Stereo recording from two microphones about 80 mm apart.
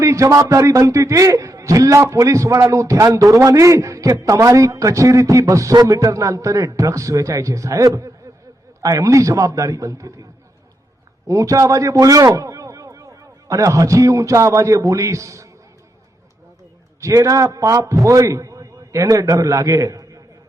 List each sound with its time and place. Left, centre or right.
0.0 s a man's voice: right
11.3 s a man's voice: right
17.0 s a man's voice: right